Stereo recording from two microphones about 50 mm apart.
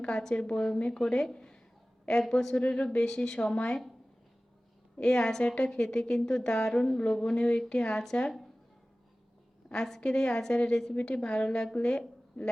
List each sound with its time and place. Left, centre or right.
0.0 s speech: centre
2.6 s speech: left
4.9 s speech: centre
9.7 s a woman's voice: centre
11.2 s a woman's voice: centre